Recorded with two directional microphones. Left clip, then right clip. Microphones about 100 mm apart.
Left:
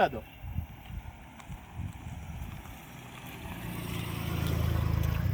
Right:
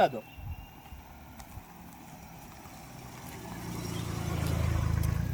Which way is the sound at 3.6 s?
85° left.